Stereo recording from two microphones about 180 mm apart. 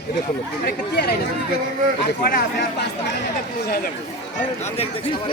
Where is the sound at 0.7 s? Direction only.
60° left (ahead or behind).